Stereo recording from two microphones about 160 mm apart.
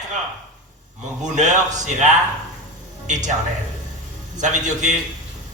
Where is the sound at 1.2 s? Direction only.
50° right (ahead or behind).